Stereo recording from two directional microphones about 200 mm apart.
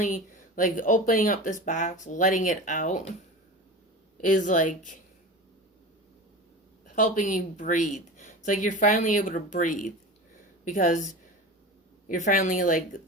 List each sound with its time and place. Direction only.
0.5 s speech: 40° left (ahead or behind)
4.2 s speech: 40° left (ahead or behind)
6.8 s speech: 40° left (ahead or behind)